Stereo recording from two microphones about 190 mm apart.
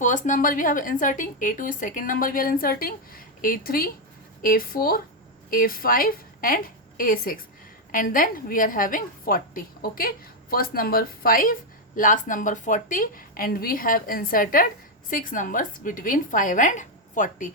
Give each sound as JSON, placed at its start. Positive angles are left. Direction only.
{"t": 0.0, "sound": "a woman's voice", "side_deg": 40}